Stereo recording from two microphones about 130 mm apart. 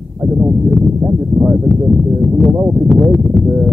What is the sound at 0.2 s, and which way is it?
Speech, 15° right (ahead or behind).